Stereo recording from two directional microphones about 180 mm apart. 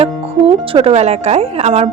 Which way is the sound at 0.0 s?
30° right (ahead or behind).